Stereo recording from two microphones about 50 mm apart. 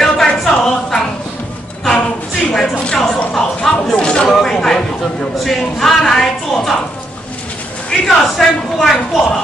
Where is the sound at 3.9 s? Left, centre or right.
Left.